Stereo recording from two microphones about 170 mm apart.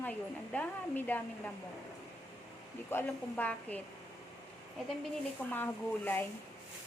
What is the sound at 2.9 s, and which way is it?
Speech, 10° left (ahead or behind).